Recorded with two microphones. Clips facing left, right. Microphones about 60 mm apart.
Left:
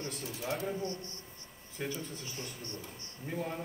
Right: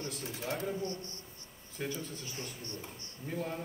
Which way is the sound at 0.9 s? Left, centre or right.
Right.